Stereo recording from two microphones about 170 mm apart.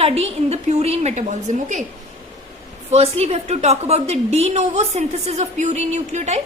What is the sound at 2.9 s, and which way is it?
A woman's voice, 40° right (ahead or behind).